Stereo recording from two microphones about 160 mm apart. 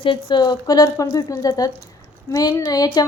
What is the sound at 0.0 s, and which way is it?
A woman's voice, 30° left (ahead or behind).